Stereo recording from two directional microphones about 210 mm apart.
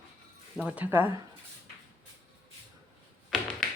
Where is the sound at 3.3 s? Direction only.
5° left (ahead or behind).